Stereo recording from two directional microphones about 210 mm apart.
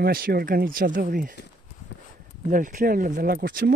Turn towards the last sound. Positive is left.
turn(degrees=-45)  # may be behind; listen again after turning